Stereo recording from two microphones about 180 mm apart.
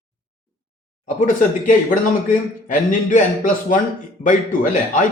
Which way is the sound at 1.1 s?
45° left (ahead or behind).